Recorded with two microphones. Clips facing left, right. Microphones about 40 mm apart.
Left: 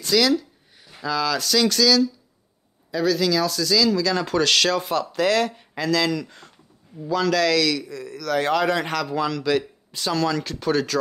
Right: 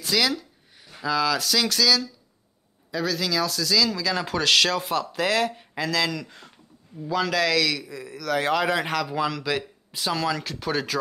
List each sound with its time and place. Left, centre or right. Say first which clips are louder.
0.0 s a man's voice: left 5 dB; centre